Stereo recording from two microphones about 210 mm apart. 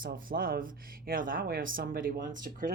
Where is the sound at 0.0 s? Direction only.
45° right (ahead or behind).